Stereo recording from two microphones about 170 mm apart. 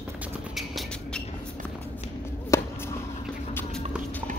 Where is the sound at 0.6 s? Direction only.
Centre (ahead or behind).